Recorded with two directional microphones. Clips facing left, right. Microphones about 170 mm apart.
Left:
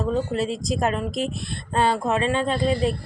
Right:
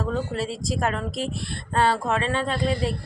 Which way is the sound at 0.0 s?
20° left (ahead or behind).